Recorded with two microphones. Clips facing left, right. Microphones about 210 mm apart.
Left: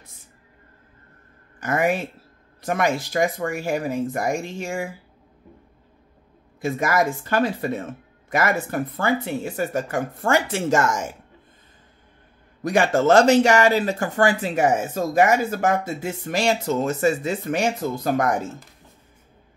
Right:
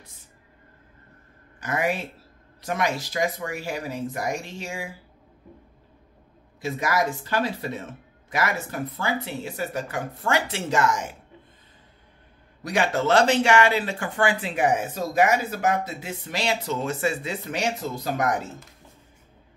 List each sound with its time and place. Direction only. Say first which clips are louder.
1.6 s speech: left 4 dB; 50° left (ahead or behind)
6.6 s speech: left 4 dB; 50° left (ahead or behind)
12.6 s speech: left 5 dB; 50° left (ahead or behind)